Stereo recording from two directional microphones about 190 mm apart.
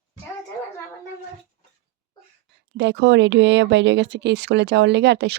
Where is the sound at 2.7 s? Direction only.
70° right (ahead or behind).